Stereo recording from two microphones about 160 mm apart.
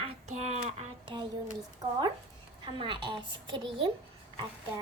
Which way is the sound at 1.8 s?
25° right (ahead or behind).